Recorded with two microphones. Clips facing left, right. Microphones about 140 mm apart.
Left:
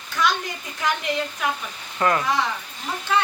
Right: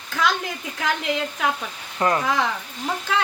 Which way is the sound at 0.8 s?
90° right.